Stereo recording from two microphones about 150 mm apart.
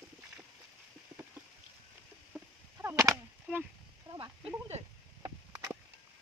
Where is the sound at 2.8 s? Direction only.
20° right (ahead or behind).